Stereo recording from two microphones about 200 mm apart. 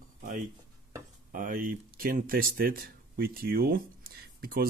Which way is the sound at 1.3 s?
45° right (ahead or behind).